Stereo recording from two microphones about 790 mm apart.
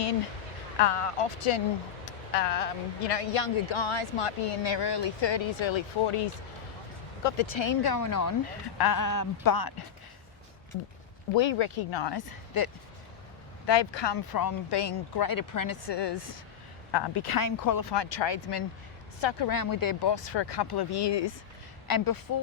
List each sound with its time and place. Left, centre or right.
0.8 s speech: left
7.3 s speech: left
11.3 s speech: left